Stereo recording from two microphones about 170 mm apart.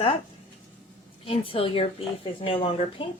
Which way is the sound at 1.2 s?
30° left (ahead or behind).